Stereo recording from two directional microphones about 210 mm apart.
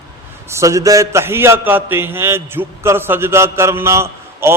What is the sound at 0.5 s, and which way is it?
A man's voice, 15° right (ahead or behind).